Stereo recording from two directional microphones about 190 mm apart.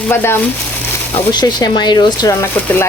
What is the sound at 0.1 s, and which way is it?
Speech, 10° left (ahead or behind).